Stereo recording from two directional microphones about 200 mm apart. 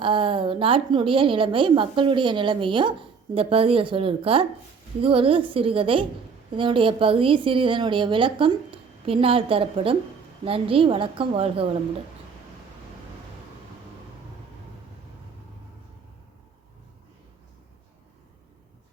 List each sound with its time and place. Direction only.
0.0 s a woman's voice: 25° right (ahead or behind)